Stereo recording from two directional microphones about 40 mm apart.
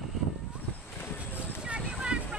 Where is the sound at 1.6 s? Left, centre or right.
Right.